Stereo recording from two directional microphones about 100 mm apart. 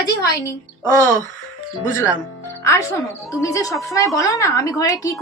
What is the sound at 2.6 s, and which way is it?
A woman's voice, 30° left (ahead or behind).